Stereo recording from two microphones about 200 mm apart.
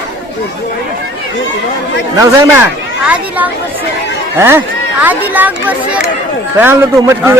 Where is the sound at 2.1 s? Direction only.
10° right (ahead or behind).